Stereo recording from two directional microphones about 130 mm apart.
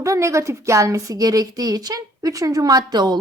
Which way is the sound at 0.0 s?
25° right (ahead or behind).